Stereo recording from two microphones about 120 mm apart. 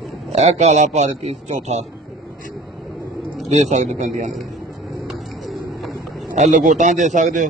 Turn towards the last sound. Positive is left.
turn(degrees=-90)